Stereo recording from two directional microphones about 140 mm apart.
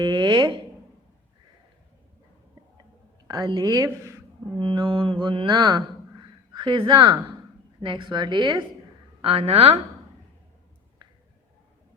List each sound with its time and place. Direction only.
0.0 s a sound: 30° right (ahead or behind)
3.2 s a woman's voice: 30° right (ahead or behind)
4.5 s mantra: 35° right (ahead or behind)
6.5 s speech: 35° right (ahead or behind)
7.8 s mantra: 35° right (ahead or behind)
9.2 s speech: 45° right (ahead or behind)